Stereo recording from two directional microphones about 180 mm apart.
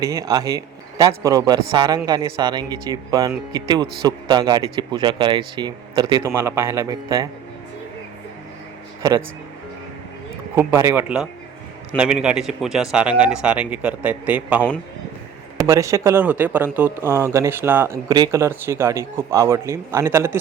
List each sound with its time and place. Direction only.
0.0 s a man's voice: 20° right (ahead or behind)
9.0 s speech: 15° right (ahead or behind)
10.5 s speech: 15° right (ahead or behind)